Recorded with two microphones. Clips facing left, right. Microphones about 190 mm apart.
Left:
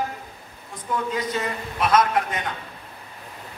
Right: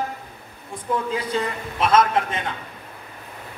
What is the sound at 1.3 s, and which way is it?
A woman's voice, 25° right (ahead or behind).